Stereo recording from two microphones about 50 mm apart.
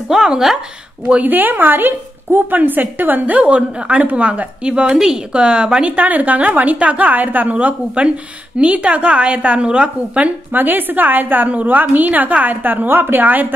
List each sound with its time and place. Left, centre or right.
0.1 s speech: centre
1.2 s a woman's voice: right
4.9 s speech: centre
5.3 s a woman's voice: centre
5.9 s a woman's voice: right
10.5 s a woman's voice: right